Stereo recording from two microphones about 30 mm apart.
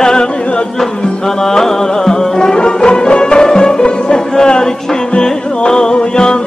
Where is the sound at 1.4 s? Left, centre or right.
Centre.